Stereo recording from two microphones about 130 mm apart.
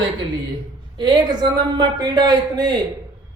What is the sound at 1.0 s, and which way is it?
A woman's voice, 35° right (ahead or behind).